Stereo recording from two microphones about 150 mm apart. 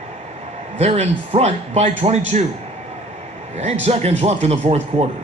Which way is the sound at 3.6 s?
45° right (ahead or behind).